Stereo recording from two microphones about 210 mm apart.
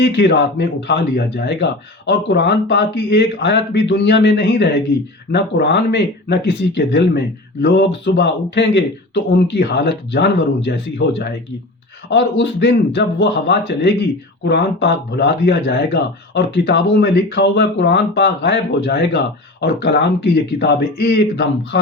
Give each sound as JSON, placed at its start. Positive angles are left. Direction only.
{"t": 0.0, "sound": "speech", "side_deg": 55}